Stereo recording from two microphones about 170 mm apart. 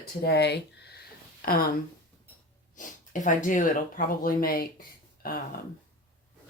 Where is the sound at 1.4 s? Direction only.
60° left (ahead or behind).